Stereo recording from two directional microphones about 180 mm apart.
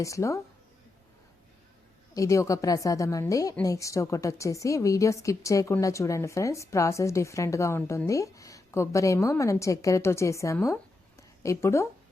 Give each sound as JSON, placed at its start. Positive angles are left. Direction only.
{"t": 0.0, "sound": "a woman's voice", "side_deg": 15}
{"t": 2.1, "sound": "a woman's voice", "side_deg": 15}
{"t": 11.2, "sound": "a sound", "side_deg": 15}